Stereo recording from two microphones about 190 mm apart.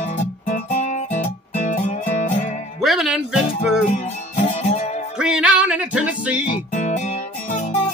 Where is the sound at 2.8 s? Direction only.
Centre (ahead or behind).